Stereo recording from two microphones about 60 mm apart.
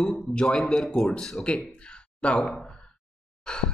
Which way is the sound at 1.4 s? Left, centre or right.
Centre.